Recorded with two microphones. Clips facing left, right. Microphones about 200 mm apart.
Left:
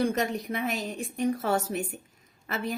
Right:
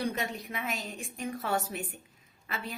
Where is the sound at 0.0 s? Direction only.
45° left (ahead or behind).